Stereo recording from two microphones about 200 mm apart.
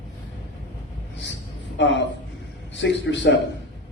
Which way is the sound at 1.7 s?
60° left (ahead or behind).